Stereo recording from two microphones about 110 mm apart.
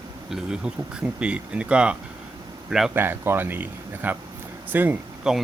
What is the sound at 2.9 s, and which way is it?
Speech, 20° right (ahead or behind).